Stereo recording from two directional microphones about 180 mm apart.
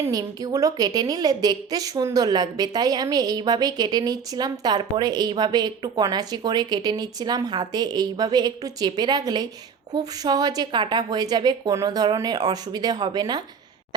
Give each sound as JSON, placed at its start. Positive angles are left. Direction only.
{"t": 0.0, "sound": "a woman's voice", "side_deg": -20}